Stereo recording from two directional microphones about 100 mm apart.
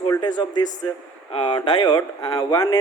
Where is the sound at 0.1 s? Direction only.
45° left (ahead or behind).